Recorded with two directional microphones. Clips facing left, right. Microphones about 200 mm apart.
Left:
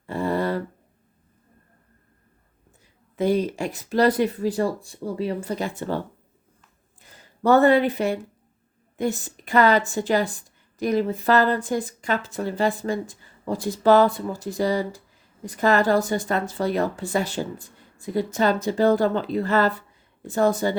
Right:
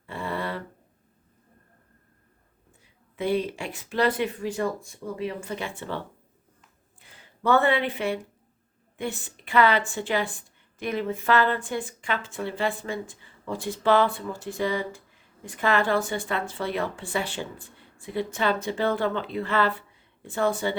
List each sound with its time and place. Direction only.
0.0 s a sound: 40° left (ahead or behind)
2.8 s a woman's voice: 40° left (ahead or behind)
7.0 s a woman's voice: 40° left (ahead or behind)